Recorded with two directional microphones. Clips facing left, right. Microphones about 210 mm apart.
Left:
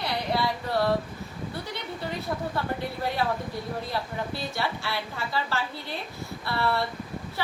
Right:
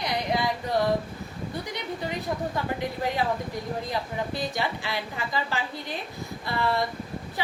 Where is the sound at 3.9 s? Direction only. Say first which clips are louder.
Right 1 dB; 15° right (ahead or behind).